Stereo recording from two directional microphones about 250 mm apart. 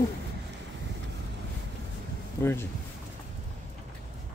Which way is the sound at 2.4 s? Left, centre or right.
Centre.